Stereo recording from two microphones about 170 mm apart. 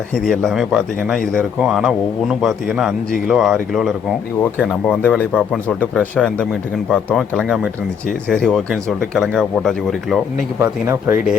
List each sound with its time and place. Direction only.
0.3 s a man's voice: centre (ahead or behind)
10.6 s speech: 15° right (ahead or behind)